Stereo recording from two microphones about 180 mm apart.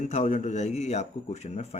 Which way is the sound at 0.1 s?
40° left (ahead or behind).